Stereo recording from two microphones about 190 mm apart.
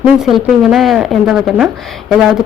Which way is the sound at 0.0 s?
Centre (ahead or behind).